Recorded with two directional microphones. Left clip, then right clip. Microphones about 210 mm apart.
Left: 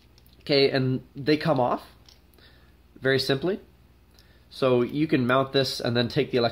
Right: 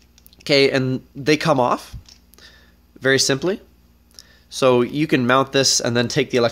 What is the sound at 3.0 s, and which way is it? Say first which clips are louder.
Speech: right 6 dB; 45° right (ahead or behind).